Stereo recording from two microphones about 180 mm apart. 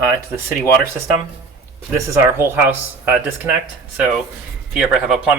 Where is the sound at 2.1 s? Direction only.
15° right (ahead or behind).